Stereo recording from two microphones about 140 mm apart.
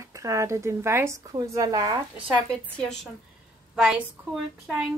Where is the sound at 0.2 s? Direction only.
20° right (ahead or behind).